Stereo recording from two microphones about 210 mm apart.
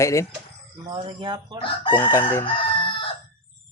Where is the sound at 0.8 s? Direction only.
25° right (ahead or behind).